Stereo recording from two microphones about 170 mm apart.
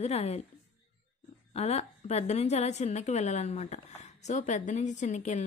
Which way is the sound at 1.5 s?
35° left (ahead or behind).